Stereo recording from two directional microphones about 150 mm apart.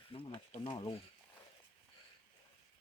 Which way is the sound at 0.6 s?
30° left (ahead or behind).